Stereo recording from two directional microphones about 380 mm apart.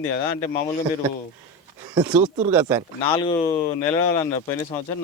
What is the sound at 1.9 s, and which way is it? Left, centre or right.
Speech, centre.